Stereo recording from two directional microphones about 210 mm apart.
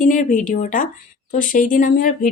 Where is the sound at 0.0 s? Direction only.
40° left (ahead or behind).